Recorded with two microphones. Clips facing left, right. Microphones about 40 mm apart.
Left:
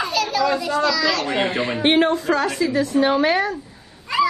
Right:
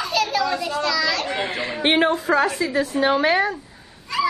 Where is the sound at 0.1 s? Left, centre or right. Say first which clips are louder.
Even; centre.